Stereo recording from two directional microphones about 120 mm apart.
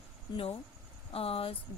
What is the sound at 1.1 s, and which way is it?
Speech, 55° left (ahead or behind).